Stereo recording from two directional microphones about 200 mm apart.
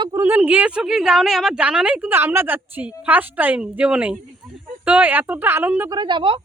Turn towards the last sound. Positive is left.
turn(degrees=-25)  # may be behind; listen again after turning